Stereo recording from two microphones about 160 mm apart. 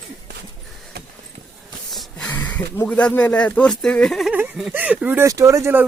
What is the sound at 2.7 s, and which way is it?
Speech, 10° left (ahead or behind).